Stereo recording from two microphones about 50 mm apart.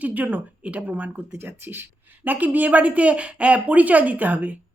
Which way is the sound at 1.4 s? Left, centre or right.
Right.